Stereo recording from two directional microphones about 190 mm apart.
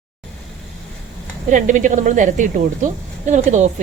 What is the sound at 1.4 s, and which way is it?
A woman's voice, 40° right (ahead or behind).